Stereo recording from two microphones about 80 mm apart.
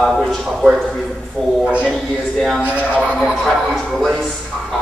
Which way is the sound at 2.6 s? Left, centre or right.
Centre.